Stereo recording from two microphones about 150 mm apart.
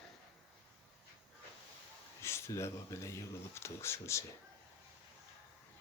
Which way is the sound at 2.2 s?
15° left (ahead or behind).